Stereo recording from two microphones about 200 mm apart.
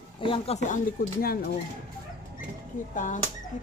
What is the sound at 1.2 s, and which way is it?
Speech, 50° left (ahead or behind).